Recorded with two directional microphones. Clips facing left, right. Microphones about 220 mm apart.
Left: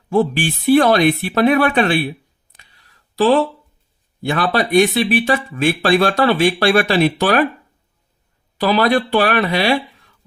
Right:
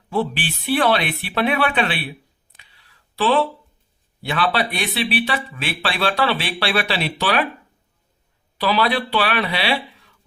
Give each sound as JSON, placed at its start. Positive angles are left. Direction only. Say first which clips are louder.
{"t": 0.1, "sound": "speech", "louder": "left 6 dB", "side_deg": 45}
{"t": 2.5, "sound": "a sound", "louder": "left 2 dB", "side_deg": 45}
{"t": 4.3, "sound": "speech", "louder": "left 5 dB", "side_deg": 45}
{"t": 8.5, "sound": "speech", "louder": "left 5 dB", "side_deg": 45}